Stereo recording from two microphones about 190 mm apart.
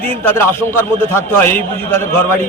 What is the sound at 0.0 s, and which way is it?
A man's voice, 10° left (ahead or behind).